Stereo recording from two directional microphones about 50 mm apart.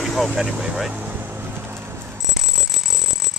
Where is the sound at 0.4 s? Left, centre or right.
Centre.